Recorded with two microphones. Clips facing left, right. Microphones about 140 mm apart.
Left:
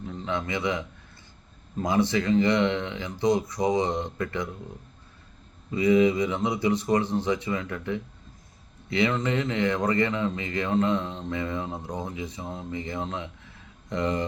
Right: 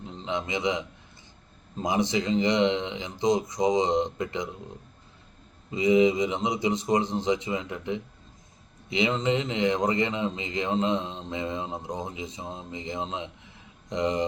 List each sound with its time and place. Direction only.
0.0 s a man's voice: 20° right (ahead or behind)
5.7 s a man's voice: 20° right (ahead or behind)